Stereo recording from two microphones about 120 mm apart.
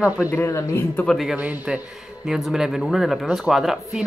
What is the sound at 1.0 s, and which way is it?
Speech, centre (ahead or behind).